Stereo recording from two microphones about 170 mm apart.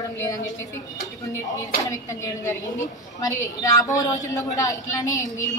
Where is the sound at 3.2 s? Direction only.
20° left (ahead or behind).